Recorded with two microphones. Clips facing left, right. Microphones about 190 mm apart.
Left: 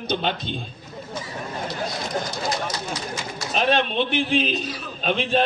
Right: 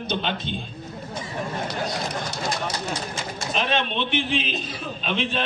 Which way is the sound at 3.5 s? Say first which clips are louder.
Left 4 dB; 40° left (ahead or behind).